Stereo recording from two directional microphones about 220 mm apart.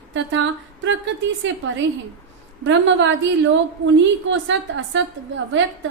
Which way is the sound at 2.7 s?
55° right (ahead or behind).